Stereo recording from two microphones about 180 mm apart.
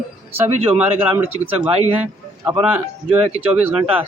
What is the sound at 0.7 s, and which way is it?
Speech, 10° right (ahead or behind).